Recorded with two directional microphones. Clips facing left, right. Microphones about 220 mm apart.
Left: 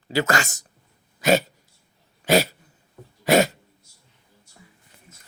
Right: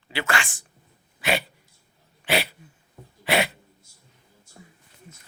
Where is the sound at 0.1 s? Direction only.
40° left (ahead or behind).